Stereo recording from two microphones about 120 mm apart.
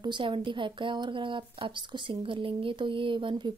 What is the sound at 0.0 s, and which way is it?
Speech, 40° right (ahead or behind).